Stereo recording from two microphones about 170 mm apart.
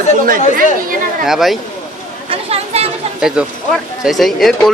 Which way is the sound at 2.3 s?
35° right (ahead or behind).